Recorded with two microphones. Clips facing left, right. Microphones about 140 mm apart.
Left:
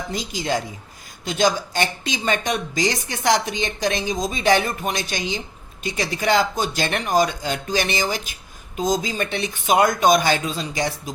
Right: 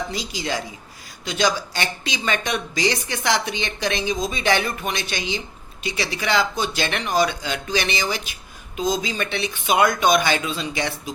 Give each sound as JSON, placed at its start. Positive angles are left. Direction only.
{"t": 0.1, "sound": "speech", "side_deg": 50}